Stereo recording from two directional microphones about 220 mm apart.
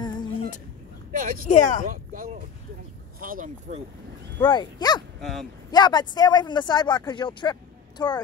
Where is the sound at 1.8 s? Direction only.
40° right (ahead or behind).